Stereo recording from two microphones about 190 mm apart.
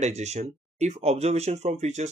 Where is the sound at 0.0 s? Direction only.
35° right (ahead or behind).